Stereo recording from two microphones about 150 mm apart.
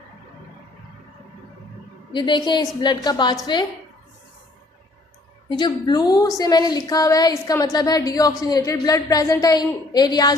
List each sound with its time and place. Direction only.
2.1 s a woman's voice: 30° left (ahead or behind)
5.5 s a woman's voice: 30° left (ahead or behind)